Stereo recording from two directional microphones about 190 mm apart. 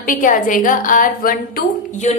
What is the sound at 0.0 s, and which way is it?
A woman's voice, 45° left (ahead or behind).